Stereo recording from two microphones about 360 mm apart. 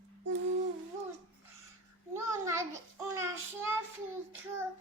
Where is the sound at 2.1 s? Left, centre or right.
Centre.